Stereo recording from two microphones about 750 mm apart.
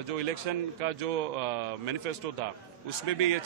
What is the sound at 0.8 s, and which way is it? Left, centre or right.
Speech, right.